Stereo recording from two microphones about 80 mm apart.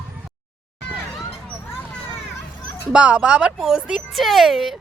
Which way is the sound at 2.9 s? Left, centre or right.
Centre.